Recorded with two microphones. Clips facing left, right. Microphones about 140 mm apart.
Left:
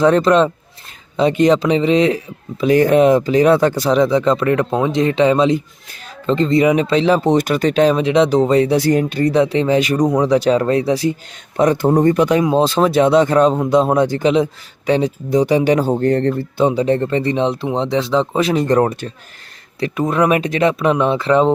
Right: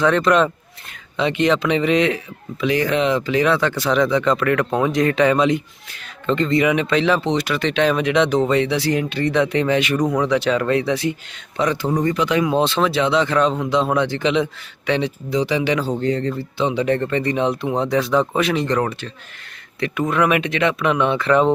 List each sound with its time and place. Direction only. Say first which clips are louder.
0.0 s speech: left 4 dB; 35° left (ahead or behind)
16.8 s speech: left 3 dB; 30° left (ahead or behind)